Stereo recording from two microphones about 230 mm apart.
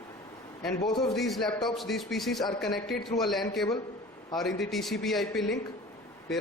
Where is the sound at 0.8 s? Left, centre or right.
Centre.